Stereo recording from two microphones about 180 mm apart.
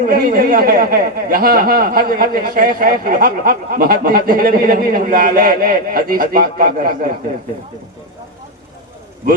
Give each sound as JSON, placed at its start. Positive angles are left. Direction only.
{"t": 0.0, "sound": "speech", "side_deg": -55}